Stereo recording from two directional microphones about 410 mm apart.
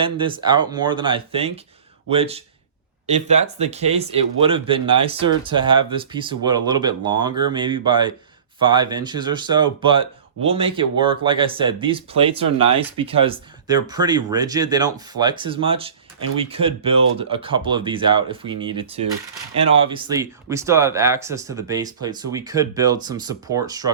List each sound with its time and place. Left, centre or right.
0.0 s speech: centre